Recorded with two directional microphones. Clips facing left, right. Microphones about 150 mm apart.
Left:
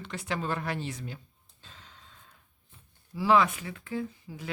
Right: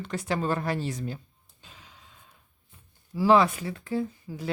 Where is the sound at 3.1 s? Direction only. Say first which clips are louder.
Right 3 dB; 35° right (ahead or behind).